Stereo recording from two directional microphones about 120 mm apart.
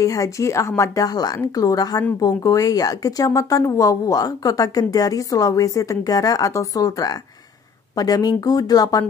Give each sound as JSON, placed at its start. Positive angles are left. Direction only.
{"t": 0.0, "sound": "speech", "side_deg": 30}